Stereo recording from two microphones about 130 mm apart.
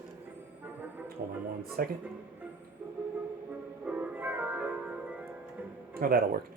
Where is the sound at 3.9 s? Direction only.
10° right (ahead or behind).